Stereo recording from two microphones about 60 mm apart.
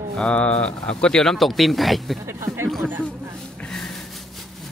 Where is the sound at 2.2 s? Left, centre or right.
Right.